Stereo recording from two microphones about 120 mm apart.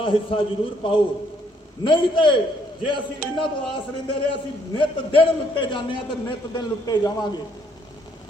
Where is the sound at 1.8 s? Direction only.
45° left (ahead or behind).